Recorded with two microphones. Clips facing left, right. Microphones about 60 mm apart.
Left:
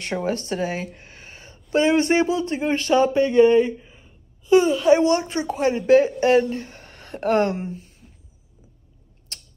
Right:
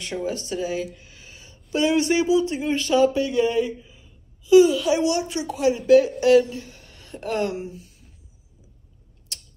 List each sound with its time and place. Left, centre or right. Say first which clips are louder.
0.0 s speech: left 3 dB; left
9.3 s tick-tock: even; left